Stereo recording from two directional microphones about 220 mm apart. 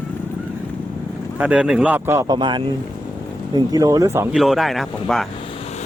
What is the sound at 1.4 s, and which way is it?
Speech, 5° right (ahead or behind).